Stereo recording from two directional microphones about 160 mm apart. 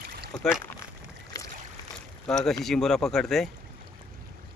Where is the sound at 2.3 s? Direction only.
Centre (ahead or behind).